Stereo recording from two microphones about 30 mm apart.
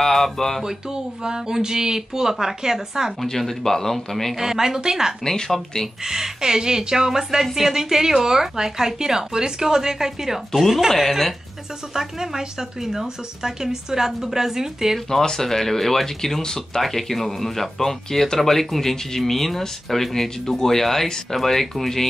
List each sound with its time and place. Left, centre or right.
0.0 s music: centre
0.6 s speech: centre
3.3 s speech: centre
4.4 s a woman's voice: centre
5.2 s speech: centre
6.0 s a woman's voice: centre
10.9 s speech: centre
11.9 s a woman's voice: centre
15.0 s speech: centre